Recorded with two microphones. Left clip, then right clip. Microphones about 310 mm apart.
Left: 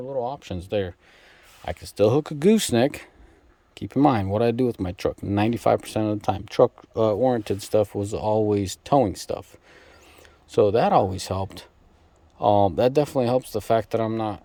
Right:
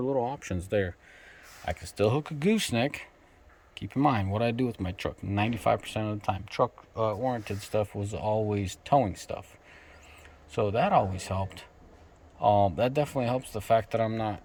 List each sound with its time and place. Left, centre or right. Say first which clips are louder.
0.3 s speech: left 3 dB; centre